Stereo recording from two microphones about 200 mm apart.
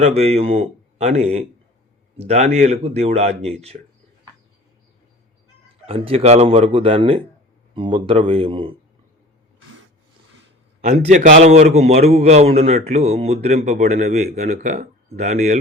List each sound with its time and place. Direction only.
0.0 s a man's voice: 35° right (ahead or behind)
5.8 s speech: 30° right (ahead or behind)
10.8 s a man's voice: 35° right (ahead or behind)